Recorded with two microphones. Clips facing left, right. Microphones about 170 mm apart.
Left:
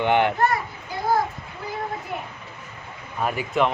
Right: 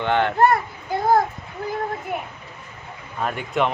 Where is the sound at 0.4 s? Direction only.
55° right (ahead or behind).